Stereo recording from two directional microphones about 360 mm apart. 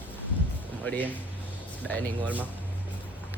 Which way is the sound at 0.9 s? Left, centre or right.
Centre.